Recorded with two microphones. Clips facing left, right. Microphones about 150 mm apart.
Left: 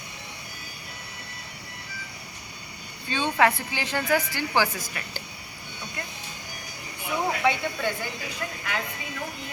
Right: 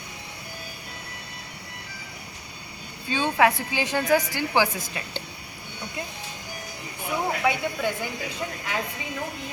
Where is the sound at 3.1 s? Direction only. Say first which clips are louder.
Right 1 dB; 10° right (ahead or behind).